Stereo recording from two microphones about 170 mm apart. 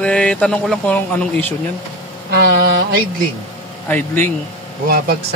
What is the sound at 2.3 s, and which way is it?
Mantra, 70° right (ahead or behind).